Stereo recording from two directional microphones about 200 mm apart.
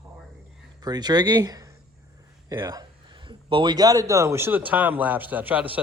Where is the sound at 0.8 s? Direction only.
20° right (ahead or behind).